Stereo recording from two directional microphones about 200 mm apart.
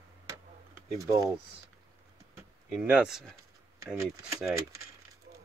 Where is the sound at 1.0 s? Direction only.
15° right (ahead or behind).